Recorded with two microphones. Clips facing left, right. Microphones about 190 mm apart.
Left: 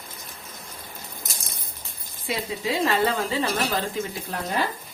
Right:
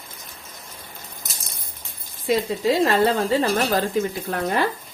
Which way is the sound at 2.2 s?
40° right (ahead or behind).